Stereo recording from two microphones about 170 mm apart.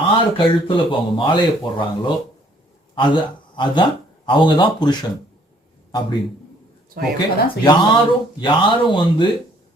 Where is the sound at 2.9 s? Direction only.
25° left (ahead or behind).